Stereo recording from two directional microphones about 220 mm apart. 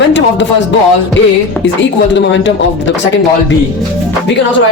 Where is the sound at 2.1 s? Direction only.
55° left (ahead or behind).